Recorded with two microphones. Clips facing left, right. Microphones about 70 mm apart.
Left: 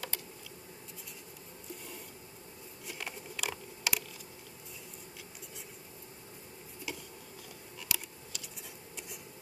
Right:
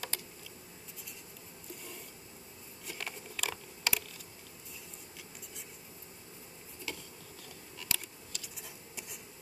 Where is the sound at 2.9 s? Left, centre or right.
Centre.